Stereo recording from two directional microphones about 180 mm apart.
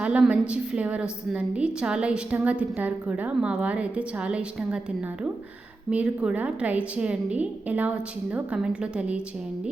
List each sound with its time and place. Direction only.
0.0 s a woman's voice: 5° right (ahead or behind)
5.9 s a woman's voice: 5° right (ahead or behind)